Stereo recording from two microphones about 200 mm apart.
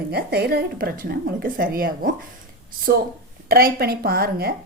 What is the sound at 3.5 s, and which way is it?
A woman's voice, 50° right (ahead or behind).